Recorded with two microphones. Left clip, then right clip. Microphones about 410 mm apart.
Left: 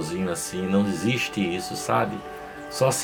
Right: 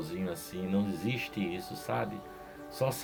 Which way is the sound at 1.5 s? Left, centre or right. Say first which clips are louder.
Left 10 dB; right.